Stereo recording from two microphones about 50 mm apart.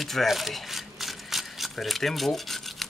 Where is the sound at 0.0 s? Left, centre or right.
Centre.